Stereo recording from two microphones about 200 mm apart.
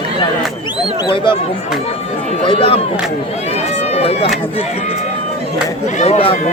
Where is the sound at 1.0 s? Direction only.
25° left (ahead or behind).